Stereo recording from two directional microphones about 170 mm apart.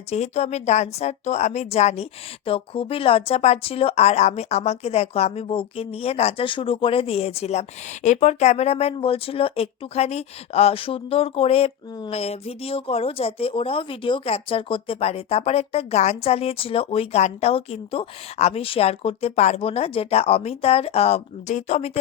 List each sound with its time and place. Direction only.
0.1 s a woman's voice: 40° left (ahead or behind)